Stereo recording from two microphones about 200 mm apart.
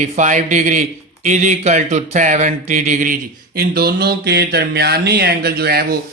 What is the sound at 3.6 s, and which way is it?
Speech, 50° right (ahead or behind).